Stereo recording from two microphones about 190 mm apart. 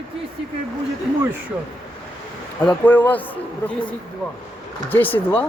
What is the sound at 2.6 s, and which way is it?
Speech, 10° left (ahead or behind).